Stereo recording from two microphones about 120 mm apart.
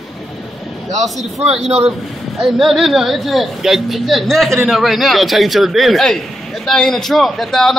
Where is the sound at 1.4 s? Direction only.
60° right (ahead or behind).